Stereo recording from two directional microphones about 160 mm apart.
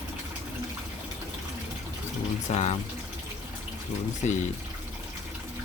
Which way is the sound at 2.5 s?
45° left (ahead or behind).